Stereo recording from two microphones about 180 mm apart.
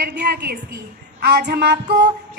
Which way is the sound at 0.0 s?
65° right (ahead or behind).